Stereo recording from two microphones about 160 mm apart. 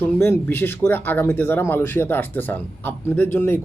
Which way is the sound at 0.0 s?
15° left (ahead or behind).